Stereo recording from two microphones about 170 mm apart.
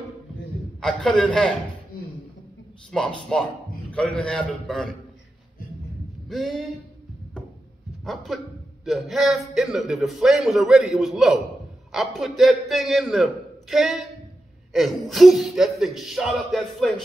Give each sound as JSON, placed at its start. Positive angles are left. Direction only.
{"t": 0.7, "sound": "a man's voice", "side_deg": 0}
{"t": 1.9, "sound": "a sound", "side_deg": 60}
{"t": 2.9, "sound": "a man's voice", "side_deg": 5}
{"t": 6.2, "sound": "speech", "side_deg": 0}
{"t": 8.0, "sound": "a man's voice", "side_deg": 0}